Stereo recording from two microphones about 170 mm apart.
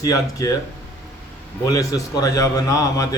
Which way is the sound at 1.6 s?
20° left (ahead or behind).